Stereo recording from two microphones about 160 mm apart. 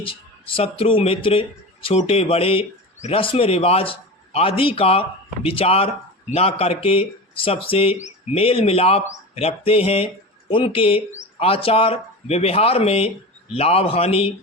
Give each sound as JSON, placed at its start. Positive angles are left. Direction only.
{"t": 0.0, "sound": "speech", "side_deg": 35}